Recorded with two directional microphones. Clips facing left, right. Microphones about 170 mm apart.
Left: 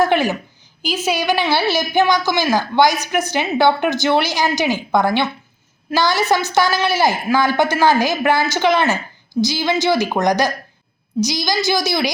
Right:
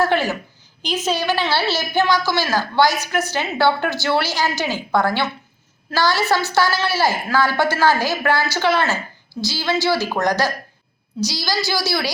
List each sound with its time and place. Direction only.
0.0 s a woman's voice: 15° left (ahead or behind)